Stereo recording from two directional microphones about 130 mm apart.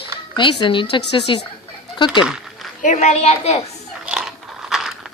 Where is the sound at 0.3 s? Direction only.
40° left (ahead or behind).